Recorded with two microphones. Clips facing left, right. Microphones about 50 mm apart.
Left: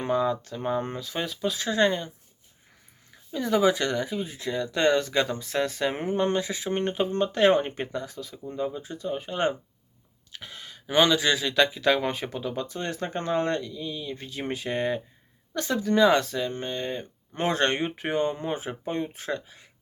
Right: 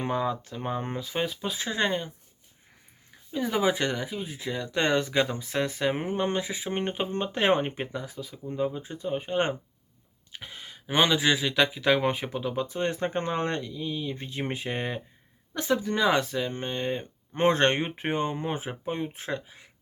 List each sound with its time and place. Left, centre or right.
0.0 s speech: centre
3.3 s speech: centre
4.0 s speech: centre
16.5 s speech: right